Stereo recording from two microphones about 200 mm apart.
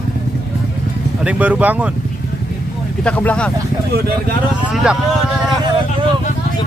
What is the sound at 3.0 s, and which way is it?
Speech, 5° left (ahead or behind).